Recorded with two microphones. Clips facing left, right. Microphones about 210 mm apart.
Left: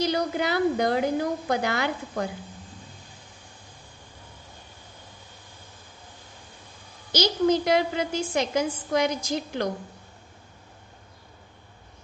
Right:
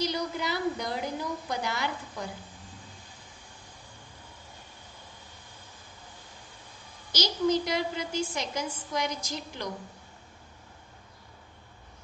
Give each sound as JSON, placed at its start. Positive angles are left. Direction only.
{"t": 0.0, "sound": "a woman's voice", "side_deg": 60}
{"t": 7.1, "sound": "a woman's voice", "side_deg": 55}